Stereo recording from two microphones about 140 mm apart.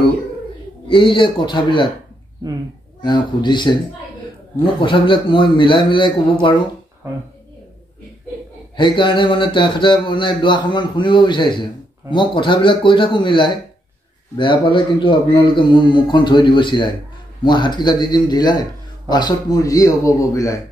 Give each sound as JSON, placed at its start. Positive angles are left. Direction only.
{"t": 0.8, "sound": "speech", "side_deg": 35}
{"t": 3.0, "sound": "speech", "side_deg": 35}
{"t": 4.7, "sound": "speech", "side_deg": 35}
{"t": 8.7, "sound": "a man's voice", "side_deg": 35}